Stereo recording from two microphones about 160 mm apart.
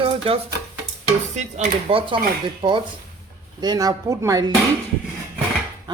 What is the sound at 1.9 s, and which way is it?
Speech, 35° right (ahead or behind).